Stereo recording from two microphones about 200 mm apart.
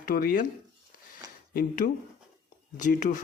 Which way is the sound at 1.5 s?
45° left (ahead or behind).